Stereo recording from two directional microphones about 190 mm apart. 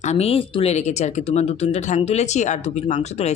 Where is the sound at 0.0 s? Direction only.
35° left (ahead or behind).